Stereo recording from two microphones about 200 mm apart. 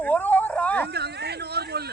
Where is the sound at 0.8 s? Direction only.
55° right (ahead or behind).